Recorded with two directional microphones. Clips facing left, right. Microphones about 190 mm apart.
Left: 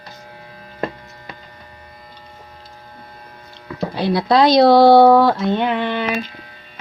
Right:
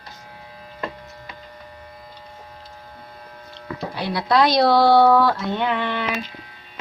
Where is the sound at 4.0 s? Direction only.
25° left (ahead or behind).